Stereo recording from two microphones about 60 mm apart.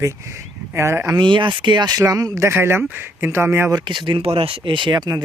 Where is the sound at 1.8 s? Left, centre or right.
Right.